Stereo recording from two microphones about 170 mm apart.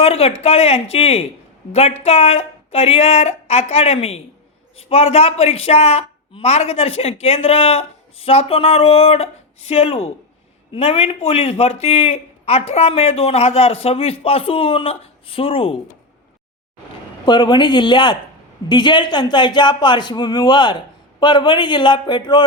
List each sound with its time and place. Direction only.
0.0 s a woman's voice: 35° left (ahead or behind)
17.2 s a man's voice: 25° left (ahead or behind)